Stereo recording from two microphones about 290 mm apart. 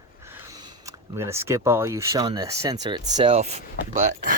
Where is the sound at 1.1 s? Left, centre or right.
Centre.